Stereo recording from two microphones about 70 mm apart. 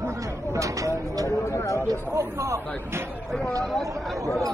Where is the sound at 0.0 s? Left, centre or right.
Right.